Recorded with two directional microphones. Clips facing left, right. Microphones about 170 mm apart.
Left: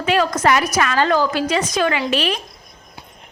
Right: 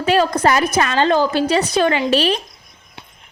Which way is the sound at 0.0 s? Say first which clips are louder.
Right 2 dB; 35° right (ahead or behind).